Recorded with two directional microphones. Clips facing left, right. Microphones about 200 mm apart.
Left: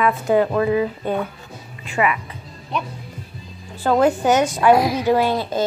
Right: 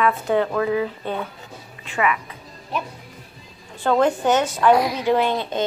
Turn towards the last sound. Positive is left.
turn(degrees=5)  # may be behind; listen again after turning